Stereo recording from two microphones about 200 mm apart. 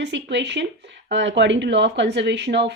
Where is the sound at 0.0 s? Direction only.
60° right (ahead or behind).